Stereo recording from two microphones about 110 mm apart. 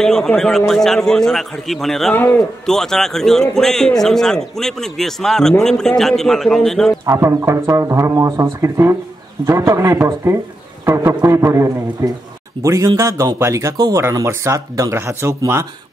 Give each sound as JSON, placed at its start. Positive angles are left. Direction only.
{"t": 0.0, "sound": "a man's voice", "side_deg": 5}
{"t": 7.1, "sound": "speech", "side_deg": -25}